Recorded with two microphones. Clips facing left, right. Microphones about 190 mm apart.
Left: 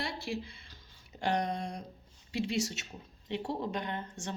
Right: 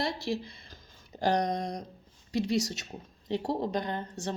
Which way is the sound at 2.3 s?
40° right (ahead or behind).